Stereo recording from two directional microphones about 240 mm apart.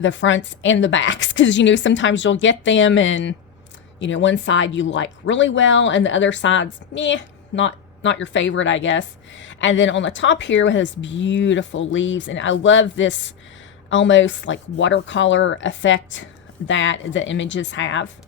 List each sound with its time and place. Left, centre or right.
0.0 s speech: left